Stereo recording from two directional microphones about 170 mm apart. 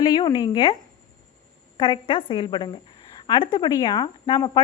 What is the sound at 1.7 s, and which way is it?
Speech, 30° left (ahead or behind).